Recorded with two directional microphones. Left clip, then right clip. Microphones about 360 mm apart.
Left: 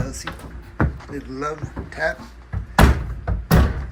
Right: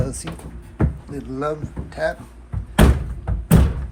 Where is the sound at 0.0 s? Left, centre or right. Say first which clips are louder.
Right 3 dB; centre.